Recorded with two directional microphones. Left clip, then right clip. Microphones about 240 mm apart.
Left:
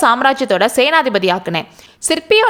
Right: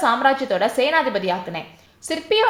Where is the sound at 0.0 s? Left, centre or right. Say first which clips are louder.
Left 5 dB; left.